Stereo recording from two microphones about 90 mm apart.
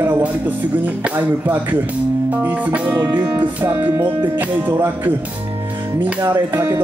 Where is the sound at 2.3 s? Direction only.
15° right (ahead or behind).